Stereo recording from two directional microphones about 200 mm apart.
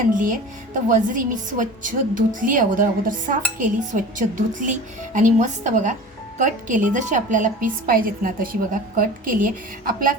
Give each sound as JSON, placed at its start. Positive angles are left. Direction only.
{"t": 0.9, "sound": "a woman's voice", "side_deg": -40}